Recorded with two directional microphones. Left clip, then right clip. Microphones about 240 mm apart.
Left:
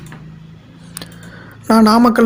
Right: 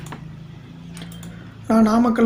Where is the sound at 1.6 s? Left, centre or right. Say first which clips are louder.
Left 7 dB; left.